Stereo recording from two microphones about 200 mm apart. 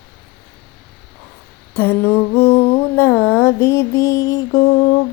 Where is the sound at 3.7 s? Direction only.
15° left (ahead or behind).